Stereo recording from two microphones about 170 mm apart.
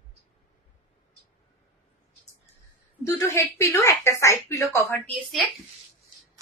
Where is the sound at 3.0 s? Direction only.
15° left (ahead or behind).